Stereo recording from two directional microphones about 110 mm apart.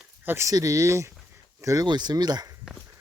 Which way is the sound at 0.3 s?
25° right (ahead or behind).